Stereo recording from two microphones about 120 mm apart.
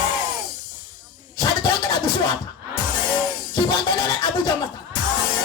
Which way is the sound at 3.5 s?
35° left (ahead or behind).